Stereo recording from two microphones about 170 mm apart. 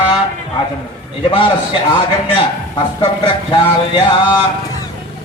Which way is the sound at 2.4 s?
30° left (ahead or behind).